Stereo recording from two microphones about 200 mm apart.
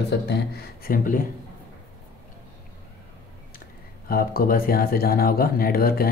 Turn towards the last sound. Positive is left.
turn(degrees=50)  # may be behind; listen again after turning